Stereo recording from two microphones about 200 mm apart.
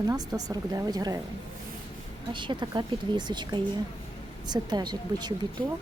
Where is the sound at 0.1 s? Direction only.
20° right (ahead or behind).